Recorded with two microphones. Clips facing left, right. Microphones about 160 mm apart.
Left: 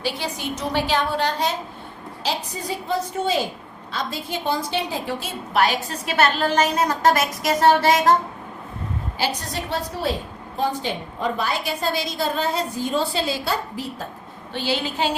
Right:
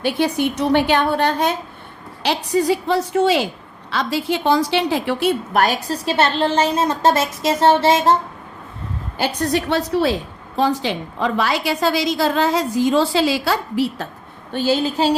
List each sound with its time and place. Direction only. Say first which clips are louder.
0.0 s a woman's voice: right 9 dB; 60° right (ahead or behind)
2.2 s a woman's voice: right 10 dB; 75° right (ahead or behind)
5.5 s a woman's voice: right 3 dB; 45° right (ahead or behind)
6.1 s a woman's voice: right 2 dB; 30° right (ahead or behind)
9.1 s a woman's voice: right 8 dB; 55° right (ahead or behind); by 14.1 s 85° right
14.5 s a woman's voice: right 7 dB; 45° right (ahead or behind)